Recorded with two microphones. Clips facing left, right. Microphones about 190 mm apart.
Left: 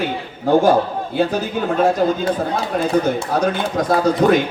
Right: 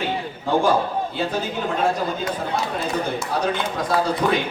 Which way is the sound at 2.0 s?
60° left (ahead or behind).